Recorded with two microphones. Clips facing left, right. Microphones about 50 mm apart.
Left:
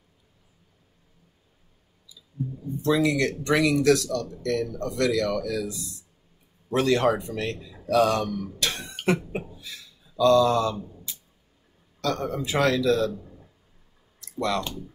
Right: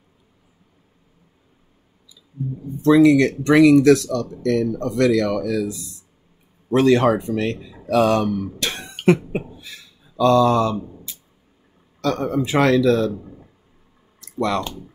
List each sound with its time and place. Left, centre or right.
2.8 s speech: right
6.7 s speech: right
8.8 s cough: right
10.1 s speech: right
12.0 s speech: right
14.4 s speech: right